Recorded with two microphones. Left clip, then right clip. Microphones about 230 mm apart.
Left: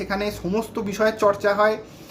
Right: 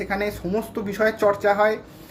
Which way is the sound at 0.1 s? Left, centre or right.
Centre.